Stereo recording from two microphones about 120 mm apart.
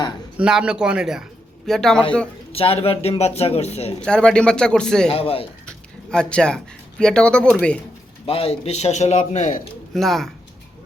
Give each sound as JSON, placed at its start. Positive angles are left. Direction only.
{"t": 0.3, "sound": "a man's voice", "side_deg": -10}
{"t": 2.5, "sound": "speech", "side_deg": 55}
{"t": 4.0, "sound": "a man's voice", "side_deg": 5}
{"t": 5.1, "sound": "speech", "side_deg": 55}
{"t": 6.1, "sound": "a man's voice", "side_deg": 5}
{"t": 8.3, "sound": "speech", "side_deg": 55}
{"t": 9.9, "sound": "speech", "side_deg": 0}